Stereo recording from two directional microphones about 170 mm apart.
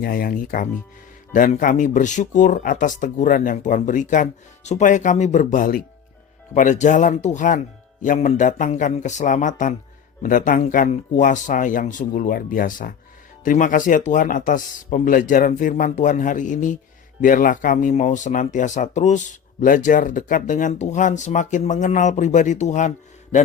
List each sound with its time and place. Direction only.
0.0 s speech: 55° left (ahead or behind)